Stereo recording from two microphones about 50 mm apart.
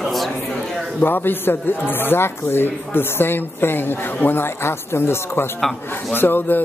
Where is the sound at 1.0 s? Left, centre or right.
Left.